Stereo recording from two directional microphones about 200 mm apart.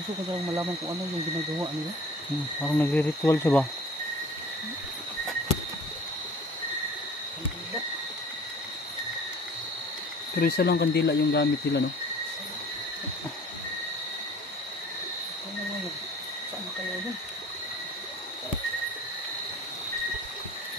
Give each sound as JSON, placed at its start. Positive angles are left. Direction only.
{"t": 2.6, "sound": "speech", "side_deg": 10}
{"t": 10.4, "sound": "speech", "side_deg": 50}